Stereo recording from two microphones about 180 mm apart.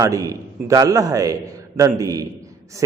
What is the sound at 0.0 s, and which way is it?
A man's voice, 20° right (ahead or behind).